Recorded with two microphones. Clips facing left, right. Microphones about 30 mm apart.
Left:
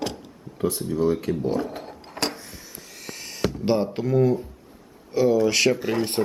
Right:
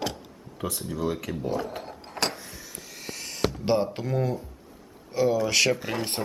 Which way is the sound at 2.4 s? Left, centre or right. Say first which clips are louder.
Even; centre.